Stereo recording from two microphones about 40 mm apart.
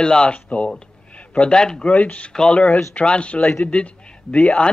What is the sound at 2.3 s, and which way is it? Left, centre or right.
A man's voice, left.